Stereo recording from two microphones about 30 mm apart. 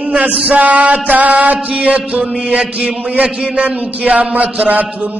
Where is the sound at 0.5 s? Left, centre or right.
Right.